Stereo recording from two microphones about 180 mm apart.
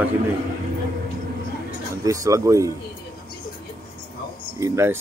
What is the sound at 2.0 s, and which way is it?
Speech, 20° right (ahead or behind).